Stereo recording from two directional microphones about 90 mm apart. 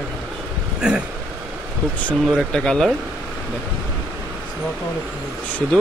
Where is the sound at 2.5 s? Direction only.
10° left (ahead or behind).